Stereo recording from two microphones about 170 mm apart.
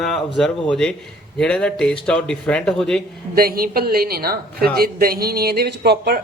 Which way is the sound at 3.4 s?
60° right (ahead or behind).